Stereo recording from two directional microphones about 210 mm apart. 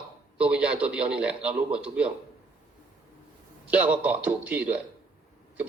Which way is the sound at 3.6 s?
5° right (ahead or behind).